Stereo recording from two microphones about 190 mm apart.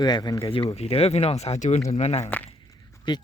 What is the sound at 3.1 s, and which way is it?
Speech, 25° left (ahead or behind).